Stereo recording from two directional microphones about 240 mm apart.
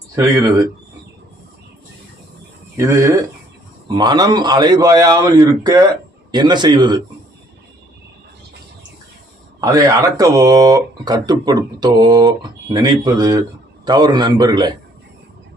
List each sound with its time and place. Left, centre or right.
0.2 s speech: centre
2.7 s speech: centre
9.6 s speech: centre